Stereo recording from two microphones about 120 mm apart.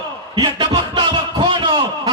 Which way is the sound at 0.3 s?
40° right (ahead or behind).